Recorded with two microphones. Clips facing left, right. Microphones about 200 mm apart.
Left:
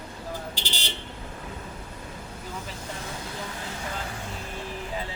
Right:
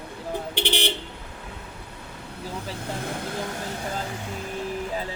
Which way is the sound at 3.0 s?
60° right (ahead or behind).